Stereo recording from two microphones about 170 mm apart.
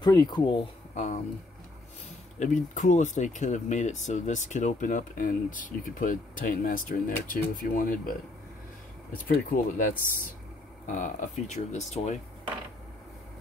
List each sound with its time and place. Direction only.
0.0 s speech: 25° left (ahead or behind)
0.9 s a sound: 45° left (ahead or behind)
2.3 s speech: 45° left (ahead or behind)